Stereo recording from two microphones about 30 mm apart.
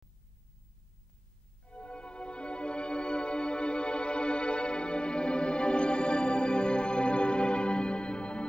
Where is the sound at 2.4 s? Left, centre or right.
Left.